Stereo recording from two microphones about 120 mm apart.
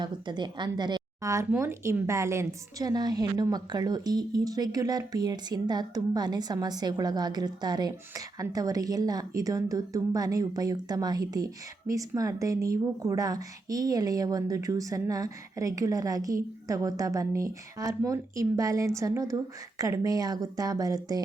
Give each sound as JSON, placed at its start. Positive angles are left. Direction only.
{"t": 0.0, "sound": "a woman's voice", "side_deg": -40}
{"t": 1.5, "sound": "a woman's voice", "side_deg": -20}